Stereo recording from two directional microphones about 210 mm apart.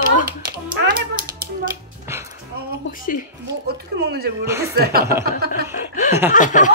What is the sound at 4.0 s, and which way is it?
Speech, 50° right (ahead or behind).